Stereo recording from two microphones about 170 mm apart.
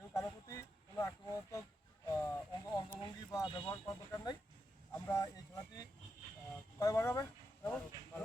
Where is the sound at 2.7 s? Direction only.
20° left (ahead or behind).